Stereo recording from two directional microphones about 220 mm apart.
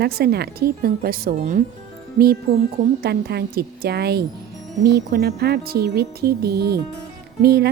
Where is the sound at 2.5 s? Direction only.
45° right (ahead or behind).